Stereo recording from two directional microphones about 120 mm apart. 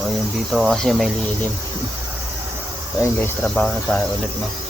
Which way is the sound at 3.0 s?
20° left (ahead or behind).